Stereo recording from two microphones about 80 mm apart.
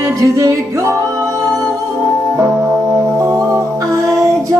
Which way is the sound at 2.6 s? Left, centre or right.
Right.